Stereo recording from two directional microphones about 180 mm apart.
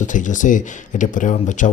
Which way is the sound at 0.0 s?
45° left (ahead or behind).